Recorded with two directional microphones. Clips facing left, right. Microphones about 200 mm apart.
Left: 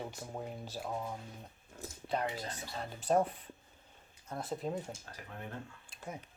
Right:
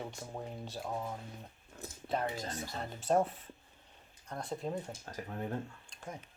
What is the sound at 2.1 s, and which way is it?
Speech, centre (ahead or behind).